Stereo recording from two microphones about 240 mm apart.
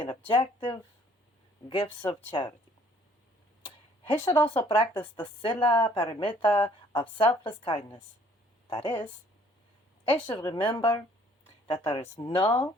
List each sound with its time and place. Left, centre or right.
0.3 s a woman's voice: left
4.3 s a woman's voice: left
10.1 s a woman's voice: centre